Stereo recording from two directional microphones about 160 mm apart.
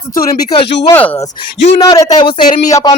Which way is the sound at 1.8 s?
20° left (ahead or behind).